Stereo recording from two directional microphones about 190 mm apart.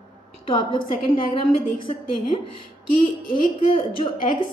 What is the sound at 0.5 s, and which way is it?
A woman's voice, 25° left (ahead or behind).